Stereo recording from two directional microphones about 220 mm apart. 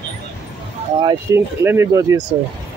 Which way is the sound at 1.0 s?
15° right (ahead or behind).